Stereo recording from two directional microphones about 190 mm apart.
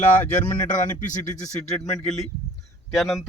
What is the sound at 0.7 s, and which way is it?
Speech, 40° left (ahead or behind).